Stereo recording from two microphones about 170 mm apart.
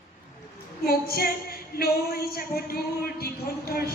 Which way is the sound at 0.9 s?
60° left (ahead or behind).